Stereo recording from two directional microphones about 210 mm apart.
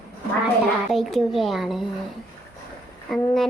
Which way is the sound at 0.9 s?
Centre (ahead or behind).